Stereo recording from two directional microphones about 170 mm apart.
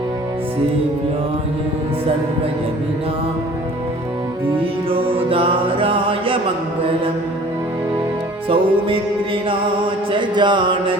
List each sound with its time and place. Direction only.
4.6 s music: 30° right (ahead or behind)
8.4 s music: 30° right (ahead or behind)